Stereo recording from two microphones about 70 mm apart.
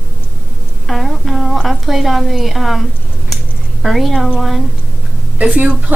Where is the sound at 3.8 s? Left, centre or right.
Centre.